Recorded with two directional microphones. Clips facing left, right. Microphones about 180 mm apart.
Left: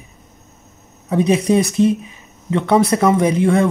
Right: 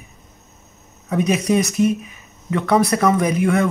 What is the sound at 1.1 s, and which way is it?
Speech, 30° left (ahead or behind).